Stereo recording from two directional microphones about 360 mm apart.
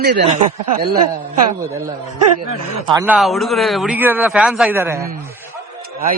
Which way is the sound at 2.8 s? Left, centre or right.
Centre.